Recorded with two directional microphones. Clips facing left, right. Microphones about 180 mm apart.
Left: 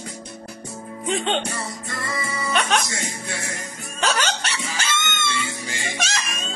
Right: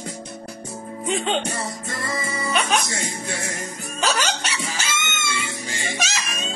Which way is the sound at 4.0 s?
5° right (ahead or behind).